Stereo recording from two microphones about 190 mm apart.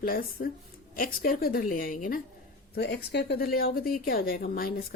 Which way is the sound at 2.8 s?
65° left (ahead or behind).